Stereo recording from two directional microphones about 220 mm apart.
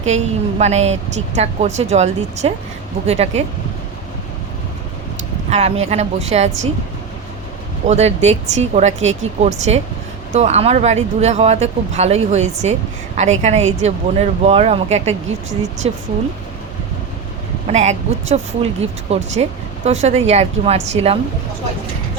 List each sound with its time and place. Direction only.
0.6 s speech: 30° right (ahead or behind)
5.5 s speech: 30° right (ahead or behind)
7.9 s speech: 30° right (ahead or behind)
17.7 s speech: 30° right (ahead or behind)